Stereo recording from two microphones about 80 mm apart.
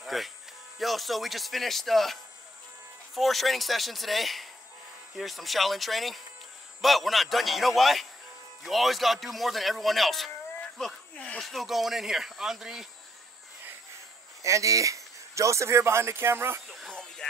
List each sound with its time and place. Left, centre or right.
0.0 s speech: centre
3.2 s speech: centre
11.1 s speech: centre
11.4 s speech: centre
14.4 s speech: right
16.9 s a sound: centre